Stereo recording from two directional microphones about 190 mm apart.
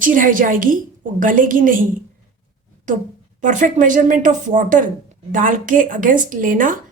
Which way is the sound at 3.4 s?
40° right (ahead or behind).